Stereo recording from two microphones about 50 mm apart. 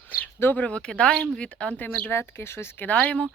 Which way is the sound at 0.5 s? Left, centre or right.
Left.